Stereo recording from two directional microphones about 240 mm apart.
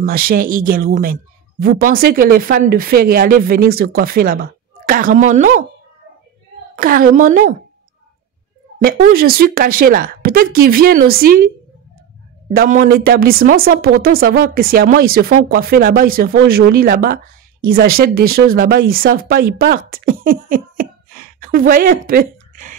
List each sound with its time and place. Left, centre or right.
0.0 s speech: right
6.7 s speech: right
8.7 s speech: right
12.5 s speech: right
19.9 s a sound: right